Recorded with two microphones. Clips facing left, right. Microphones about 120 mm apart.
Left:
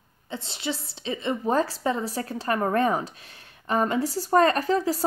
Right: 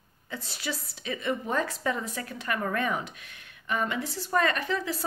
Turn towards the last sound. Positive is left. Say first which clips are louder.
# left 7 dB
turn(degrees=40)  # may be behind; listen again after turning